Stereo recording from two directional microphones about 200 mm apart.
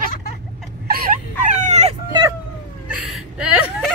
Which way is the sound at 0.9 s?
45° right (ahead or behind).